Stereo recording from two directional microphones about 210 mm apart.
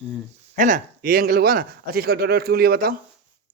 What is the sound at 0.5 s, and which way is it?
Speech, 40° right (ahead or behind).